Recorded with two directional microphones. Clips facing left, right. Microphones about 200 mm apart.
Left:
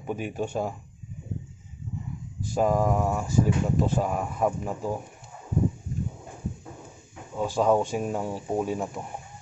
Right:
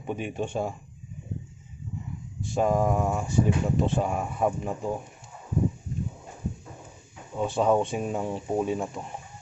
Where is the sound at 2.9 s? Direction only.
Centre (ahead or behind).